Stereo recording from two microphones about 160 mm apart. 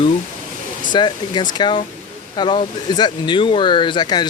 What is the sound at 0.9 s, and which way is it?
Speech, 25° left (ahead or behind).